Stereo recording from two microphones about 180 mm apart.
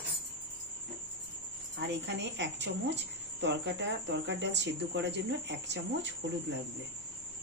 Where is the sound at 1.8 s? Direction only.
80° right.